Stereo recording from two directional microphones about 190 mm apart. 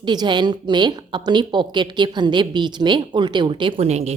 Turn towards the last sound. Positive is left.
turn(degrees=-35)  # may be behind; listen again after turning